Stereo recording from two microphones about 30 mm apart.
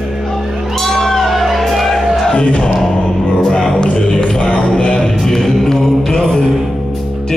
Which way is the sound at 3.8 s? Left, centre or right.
Left.